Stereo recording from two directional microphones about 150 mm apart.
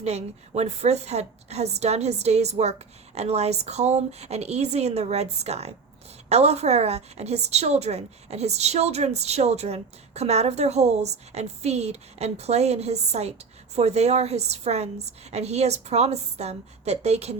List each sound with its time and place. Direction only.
0.0 s a woman's voice: 45° right (ahead or behind)